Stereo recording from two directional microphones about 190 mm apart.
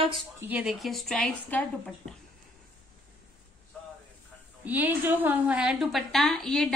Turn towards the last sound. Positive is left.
turn(degrees=0)  # may be behind; listen again after turning